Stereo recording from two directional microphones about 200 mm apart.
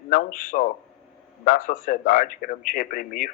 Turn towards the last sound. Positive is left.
turn(degrees=45)  # may be behind; listen again after turning